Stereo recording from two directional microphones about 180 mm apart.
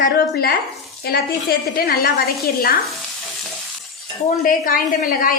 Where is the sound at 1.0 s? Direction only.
60° left (ahead or behind).